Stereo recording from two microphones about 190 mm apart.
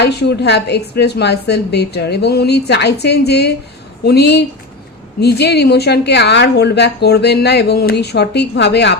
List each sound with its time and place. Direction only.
0.0 s speech: 60° left (ahead or behind)